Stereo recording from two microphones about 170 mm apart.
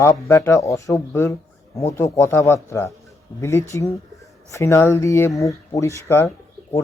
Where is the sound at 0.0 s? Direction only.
15° left (ahead or behind).